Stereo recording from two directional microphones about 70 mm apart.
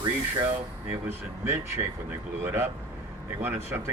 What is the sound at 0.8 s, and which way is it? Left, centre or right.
Speech, right.